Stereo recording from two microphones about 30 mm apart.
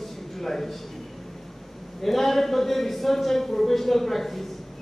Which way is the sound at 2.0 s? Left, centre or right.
Centre.